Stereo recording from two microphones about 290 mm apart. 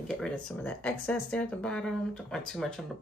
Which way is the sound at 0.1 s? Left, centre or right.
Centre.